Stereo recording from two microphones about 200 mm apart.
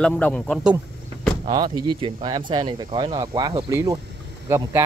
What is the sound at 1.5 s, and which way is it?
Speech, 25° right (ahead or behind).